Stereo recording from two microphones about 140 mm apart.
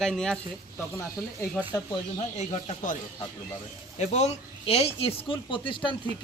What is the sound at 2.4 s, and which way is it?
Speech, 55° left (ahead or behind).